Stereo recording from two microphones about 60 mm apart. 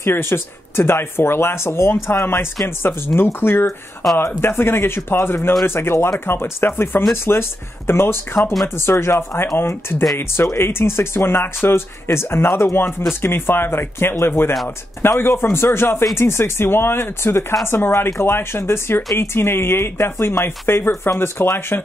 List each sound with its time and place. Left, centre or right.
0.0 s speech: left